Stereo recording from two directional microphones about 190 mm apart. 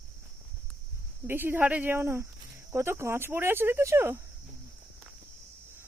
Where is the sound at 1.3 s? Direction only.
10° right (ahead or behind).